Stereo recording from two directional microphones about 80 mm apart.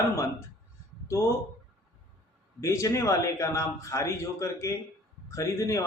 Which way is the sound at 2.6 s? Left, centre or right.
Left.